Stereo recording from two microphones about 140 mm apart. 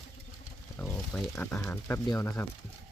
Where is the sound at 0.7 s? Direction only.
10° left (ahead or behind).